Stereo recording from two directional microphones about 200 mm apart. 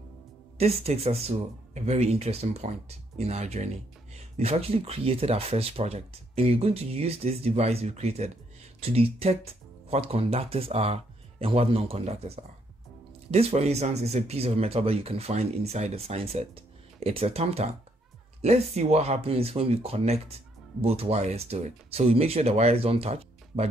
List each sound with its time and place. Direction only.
0.6 s speech: 30° right (ahead or behind)